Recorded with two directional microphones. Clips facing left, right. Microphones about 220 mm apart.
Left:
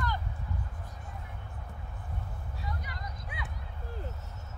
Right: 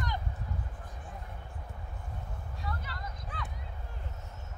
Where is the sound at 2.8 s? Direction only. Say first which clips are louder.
Even; 15° left (ahead or behind).